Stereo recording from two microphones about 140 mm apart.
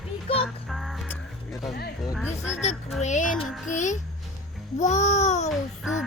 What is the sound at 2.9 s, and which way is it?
Speech, 60° left (ahead or behind).